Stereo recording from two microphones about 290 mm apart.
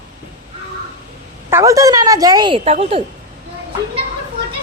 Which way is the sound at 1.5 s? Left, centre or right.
Centre.